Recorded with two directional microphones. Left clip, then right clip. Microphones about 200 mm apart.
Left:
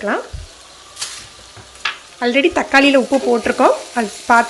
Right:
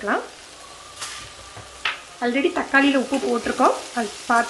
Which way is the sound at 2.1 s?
40° left (ahead or behind).